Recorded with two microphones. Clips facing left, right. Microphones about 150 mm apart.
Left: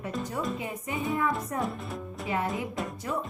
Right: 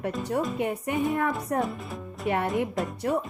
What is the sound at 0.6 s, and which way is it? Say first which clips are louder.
A woman's voice: right 7 dB; 65° right (ahead or behind).